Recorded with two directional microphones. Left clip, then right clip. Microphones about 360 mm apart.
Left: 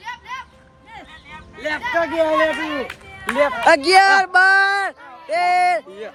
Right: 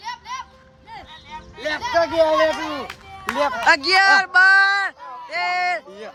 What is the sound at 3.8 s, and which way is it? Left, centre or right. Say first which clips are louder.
Speech: left 2 dB; centre.